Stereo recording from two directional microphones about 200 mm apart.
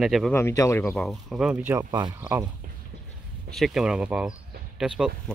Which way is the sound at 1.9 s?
20° right (ahead or behind).